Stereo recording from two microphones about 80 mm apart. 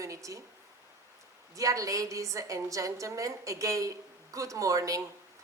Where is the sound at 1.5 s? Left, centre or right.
Right.